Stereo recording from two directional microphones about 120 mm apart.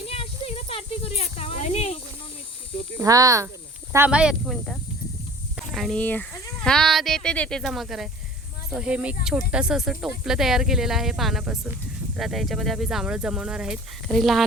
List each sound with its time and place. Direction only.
0.1 s snake: 55° left (ahead or behind)
3.0 s speech: 30° right (ahead or behind)
4.1 s speech: 5° right (ahead or behind)
5.5 s snake: centre (ahead or behind)
6.0 s speech: 15° left (ahead or behind)